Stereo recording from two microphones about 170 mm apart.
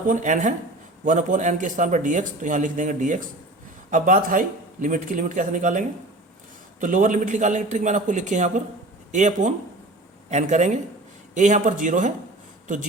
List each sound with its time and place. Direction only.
0.1 s speech: 50° right (ahead or behind)